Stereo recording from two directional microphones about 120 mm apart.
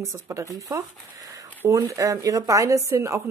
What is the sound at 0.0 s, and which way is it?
Speech, 25° right (ahead or behind).